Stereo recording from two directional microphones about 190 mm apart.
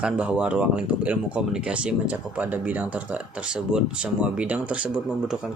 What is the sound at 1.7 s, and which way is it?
Speech, 5° right (ahead or behind).